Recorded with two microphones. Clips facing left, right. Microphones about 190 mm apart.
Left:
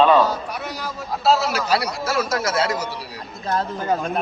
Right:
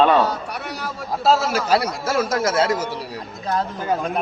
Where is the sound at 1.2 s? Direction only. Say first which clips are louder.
Right 1 dB; 50° right (ahead or behind).